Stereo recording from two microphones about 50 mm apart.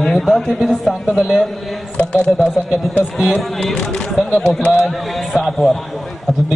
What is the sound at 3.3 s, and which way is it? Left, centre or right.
A man's voice, centre.